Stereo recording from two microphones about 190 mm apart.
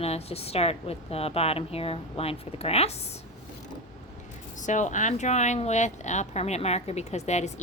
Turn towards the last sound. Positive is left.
turn(degrees=35)  # may be behind; listen again after turning